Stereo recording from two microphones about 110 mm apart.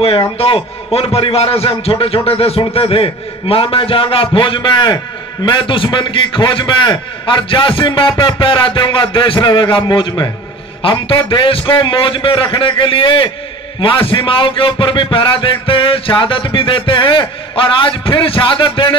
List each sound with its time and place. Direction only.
0.4 s a man's voice: 60° left (ahead or behind)